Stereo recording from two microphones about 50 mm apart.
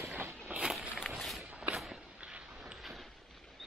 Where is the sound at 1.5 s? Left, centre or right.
Right.